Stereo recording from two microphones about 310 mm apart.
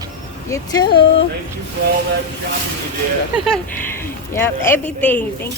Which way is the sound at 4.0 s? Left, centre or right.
Centre.